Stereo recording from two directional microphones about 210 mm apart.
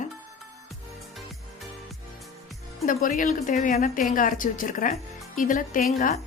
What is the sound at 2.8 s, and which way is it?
A woman's voice, 40° left (ahead or behind).